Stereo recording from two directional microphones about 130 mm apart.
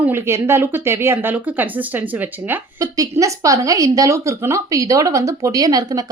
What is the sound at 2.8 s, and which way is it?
A woman's voice, 25° right (ahead or behind).